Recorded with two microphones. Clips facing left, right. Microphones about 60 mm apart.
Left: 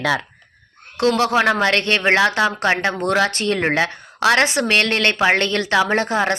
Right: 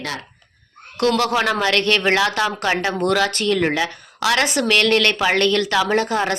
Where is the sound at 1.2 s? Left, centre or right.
Left.